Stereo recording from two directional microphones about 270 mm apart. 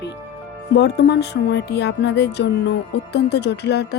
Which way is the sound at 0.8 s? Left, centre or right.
Left.